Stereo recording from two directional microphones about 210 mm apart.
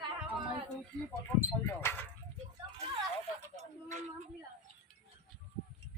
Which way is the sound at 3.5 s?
35° right (ahead or behind).